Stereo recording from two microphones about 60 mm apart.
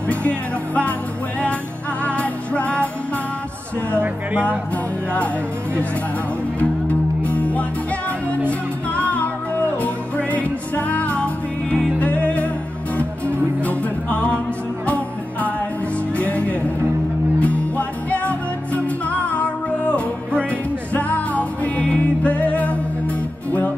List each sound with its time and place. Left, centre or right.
0.1 s music: left
2.0 s music: left
4.3 s music: right
6.6 s music: left
13.7 s music: left
16.2 s music: left